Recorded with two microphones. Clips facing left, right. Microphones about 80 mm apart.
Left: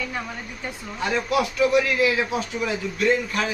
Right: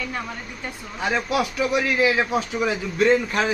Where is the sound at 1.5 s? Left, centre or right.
Right.